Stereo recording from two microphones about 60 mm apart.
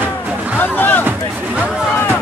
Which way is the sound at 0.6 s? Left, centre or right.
Left.